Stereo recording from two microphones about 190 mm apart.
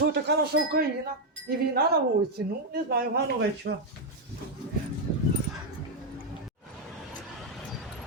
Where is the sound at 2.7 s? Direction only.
50° right (ahead or behind).